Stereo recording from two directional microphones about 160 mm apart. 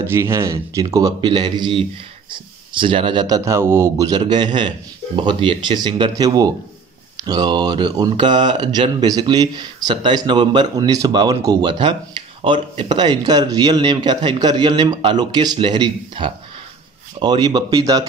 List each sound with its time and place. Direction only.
0.0 s speech: 15° right (ahead or behind)